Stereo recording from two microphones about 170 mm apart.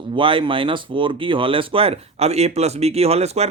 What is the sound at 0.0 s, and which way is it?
Speech, 30° right (ahead or behind).